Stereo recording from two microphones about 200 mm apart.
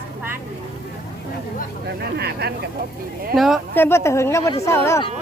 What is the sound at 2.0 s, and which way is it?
Speech, 55° right (ahead or behind).